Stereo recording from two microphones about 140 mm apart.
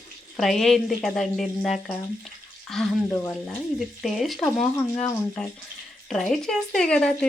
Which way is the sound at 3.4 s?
Centre (ahead or behind).